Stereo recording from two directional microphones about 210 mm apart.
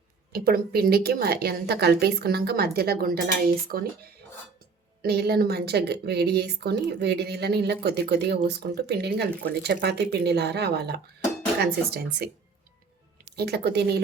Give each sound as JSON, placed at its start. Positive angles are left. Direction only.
{"t": 0.3, "sound": "a woman's voice", "side_deg": -45}
{"t": 5.0, "sound": "a woman's voice", "side_deg": -50}
{"t": 13.3, "sound": "a woman's voice", "side_deg": -50}